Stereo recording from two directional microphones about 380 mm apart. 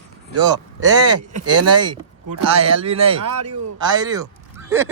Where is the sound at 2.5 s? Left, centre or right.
Centre.